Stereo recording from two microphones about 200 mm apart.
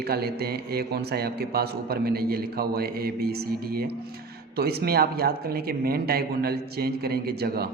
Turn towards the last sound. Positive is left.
turn(degrees=-50)  # may be behind; listen again after turning